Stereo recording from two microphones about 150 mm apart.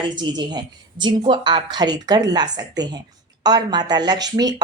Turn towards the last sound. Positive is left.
turn(degrees=-25)  # may be behind; listen again after turning